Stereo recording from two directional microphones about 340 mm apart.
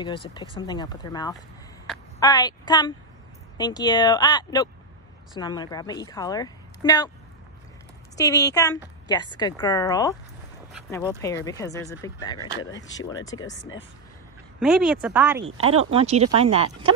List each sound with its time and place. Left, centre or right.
0.0 s speech: centre
8.2 s speech: centre
10.7 s a sound: centre
11.1 s speech: centre
14.6 s speech: centre
15.5 s speech: right
15.9 s speech: centre